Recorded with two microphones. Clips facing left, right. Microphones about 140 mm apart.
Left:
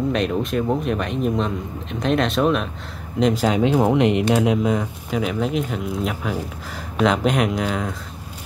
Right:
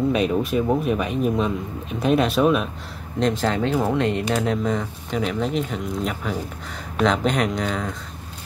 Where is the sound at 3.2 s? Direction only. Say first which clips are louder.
Left 3 dB; 5° left (ahead or behind).